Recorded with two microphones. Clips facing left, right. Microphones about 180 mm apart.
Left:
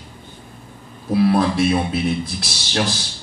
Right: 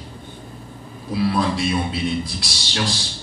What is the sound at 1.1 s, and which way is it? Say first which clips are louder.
Speech: left 4 dB; 55° left (ahead or behind).